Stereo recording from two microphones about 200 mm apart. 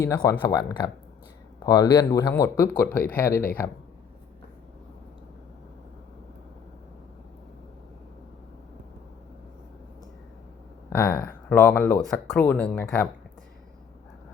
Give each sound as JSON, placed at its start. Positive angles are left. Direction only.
{"t": 0.0, "sound": "speech", "side_deg": 15}
{"t": 10.8, "sound": "speech", "side_deg": 15}